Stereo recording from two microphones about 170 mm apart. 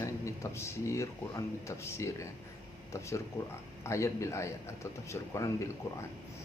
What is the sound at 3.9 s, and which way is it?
Speech, 15° left (ahead or behind).